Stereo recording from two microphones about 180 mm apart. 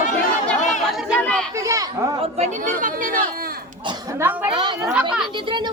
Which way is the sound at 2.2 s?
35° right (ahead or behind).